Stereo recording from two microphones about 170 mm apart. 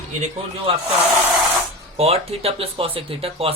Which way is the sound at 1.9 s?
35° right (ahead or behind).